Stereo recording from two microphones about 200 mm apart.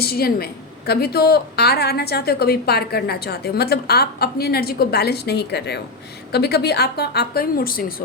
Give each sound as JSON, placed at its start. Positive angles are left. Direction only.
{"t": 0.0, "sound": "a woman's voice", "side_deg": 50}